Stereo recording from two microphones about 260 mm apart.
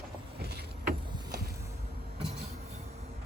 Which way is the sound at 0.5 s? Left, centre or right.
Right.